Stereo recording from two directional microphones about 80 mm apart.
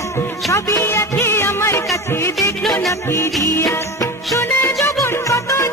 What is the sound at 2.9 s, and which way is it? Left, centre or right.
Music, left.